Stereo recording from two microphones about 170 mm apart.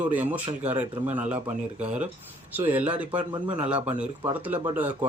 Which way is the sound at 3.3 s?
30° right (ahead or behind).